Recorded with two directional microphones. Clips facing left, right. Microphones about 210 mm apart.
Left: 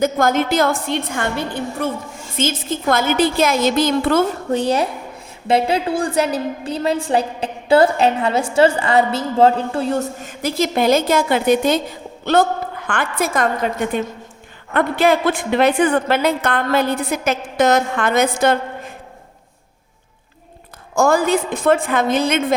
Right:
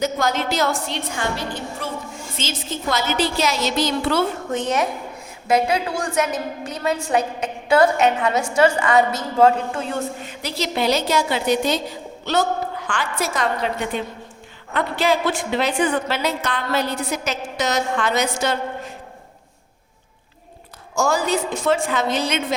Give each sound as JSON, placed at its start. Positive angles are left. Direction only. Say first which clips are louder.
{"t": 0.0, "sound": "a woman's voice", "louder": "left 5 dB", "side_deg": 50}
{"t": 4.5, "sound": "a woman's voice", "louder": "left 5 dB", "side_deg": 35}
{"t": 20.9, "sound": "a woman's voice", "louder": "left 5 dB", "side_deg": 55}